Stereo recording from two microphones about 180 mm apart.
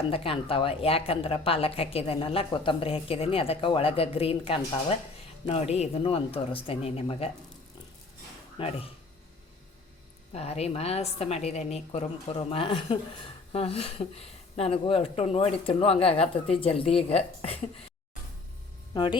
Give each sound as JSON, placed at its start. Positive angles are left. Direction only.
{"t": 0.1, "sound": "speech", "side_deg": 30}
{"t": 8.5, "sound": "speech", "side_deg": 30}
{"t": 10.3, "sound": "speech", "side_deg": 35}
{"t": 18.9, "sound": "speech", "side_deg": 25}